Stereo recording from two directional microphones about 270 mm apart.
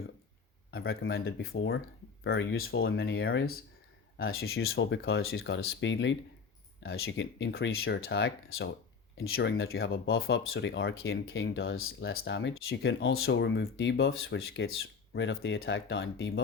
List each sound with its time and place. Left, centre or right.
0.7 s speech: left
4.7 s speech: left